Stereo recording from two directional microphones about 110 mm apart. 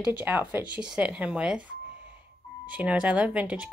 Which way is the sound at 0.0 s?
15° right (ahead or behind).